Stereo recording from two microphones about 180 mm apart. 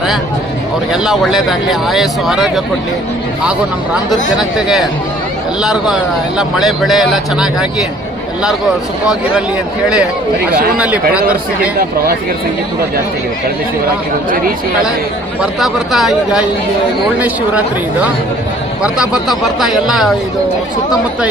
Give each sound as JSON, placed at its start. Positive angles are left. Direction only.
{"t": 0.9, "sound": "a man's voice", "side_deg": 0}
{"t": 4.4, "sound": "a man's voice", "side_deg": 0}
{"t": 10.8, "sound": "speech", "side_deg": -5}
{"t": 14.3, "sound": "speech", "side_deg": -55}
{"t": 15.4, "sound": "a man's voice", "side_deg": 0}
{"t": 18.8, "sound": "a man's voice", "side_deg": -5}